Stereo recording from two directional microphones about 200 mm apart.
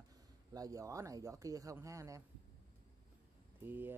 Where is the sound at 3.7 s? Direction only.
10° right (ahead or behind).